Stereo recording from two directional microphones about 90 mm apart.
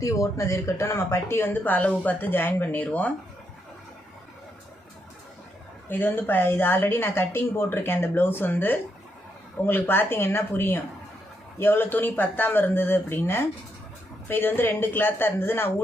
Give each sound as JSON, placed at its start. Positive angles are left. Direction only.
{"t": 0.0, "sound": "speech", "side_deg": 40}
{"t": 5.9, "sound": "speech", "side_deg": 20}